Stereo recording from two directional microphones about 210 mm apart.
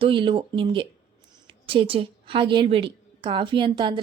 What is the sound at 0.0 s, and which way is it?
A woman's voice, 25° right (ahead or behind).